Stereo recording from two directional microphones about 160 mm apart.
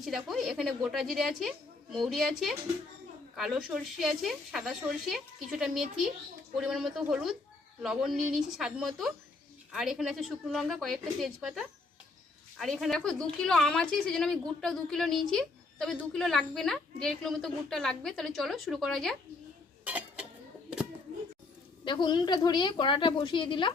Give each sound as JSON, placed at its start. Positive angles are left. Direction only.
{"t": 0.0, "sound": "a woman's voice", "side_deg": 0}
{"t": 19.8, "sound": "a sound", "side_deg": -10}
{"t": 21.8, "sound": "a woman's voice", "side_deg": 25}